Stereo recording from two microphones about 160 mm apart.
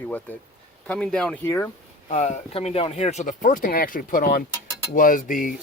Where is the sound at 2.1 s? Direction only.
45° left (ahead or behind); by 4.4 s 65° left (ahead or behind).